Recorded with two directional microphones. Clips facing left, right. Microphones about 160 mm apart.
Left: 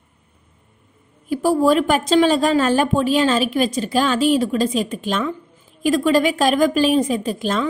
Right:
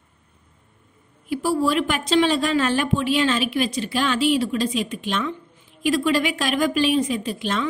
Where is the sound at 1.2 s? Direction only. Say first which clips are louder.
Left 5 dB; 45° left (ahead or behind).